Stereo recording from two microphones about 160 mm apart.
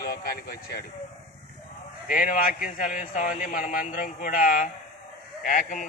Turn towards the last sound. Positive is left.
turn(degrees=60)  # may be behind; listen again after turning